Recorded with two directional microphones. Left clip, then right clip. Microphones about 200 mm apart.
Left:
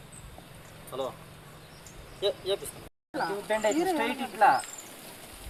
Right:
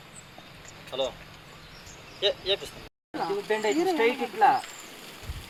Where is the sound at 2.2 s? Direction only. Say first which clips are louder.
Right 3 dB; 60° left (ahead or behind).